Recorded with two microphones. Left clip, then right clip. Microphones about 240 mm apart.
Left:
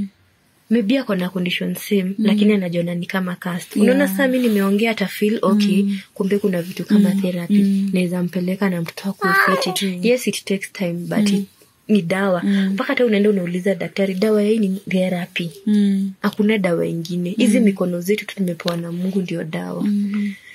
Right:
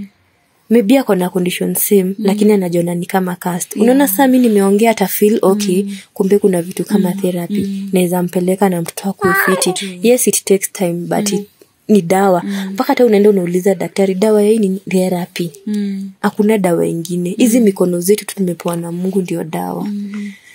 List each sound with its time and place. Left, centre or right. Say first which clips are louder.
0.7 s speech: right 8 dB; right
9.2 s a child's voice: right 2 dB; centre
9.8 s speech: right 9 dB; right
15.6 s speech: left 2 dB; centre
16.2 s speech: right 7 dB; right